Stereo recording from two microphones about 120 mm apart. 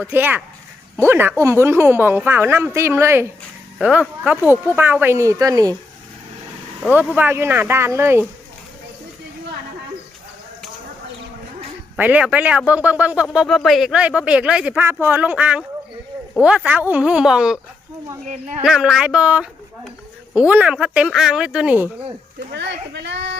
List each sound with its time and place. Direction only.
0.1 s speech: 15° right (ahead or behind)
3.8 s speech: 10° right (ahead or behind); by 5.7 s 30° right (ahead or behind)
7.2 s speech: 20° right (ahead or behind)
11.9 s speech: 10° right (ahead or behind)
13.3 s speech: centre (ahead or behind)
18.6 s speech: 5° right (ahead or behind)